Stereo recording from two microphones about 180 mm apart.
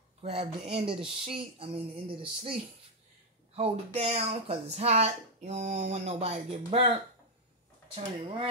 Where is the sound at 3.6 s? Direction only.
35° right (ahead or behind).